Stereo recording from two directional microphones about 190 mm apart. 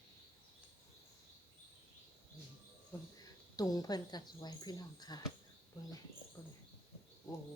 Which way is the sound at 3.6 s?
20° left (ahead or behind).